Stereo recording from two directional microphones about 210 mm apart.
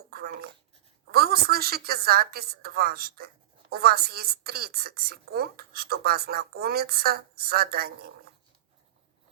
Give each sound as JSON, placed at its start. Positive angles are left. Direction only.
{"t": 0.1, "sound": "a woman's voice", "side_deg": -45}